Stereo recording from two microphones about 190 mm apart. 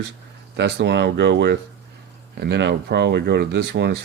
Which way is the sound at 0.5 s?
60° right (ahead or behind).